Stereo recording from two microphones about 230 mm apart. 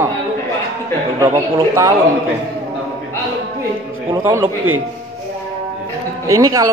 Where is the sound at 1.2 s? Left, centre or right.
Centre.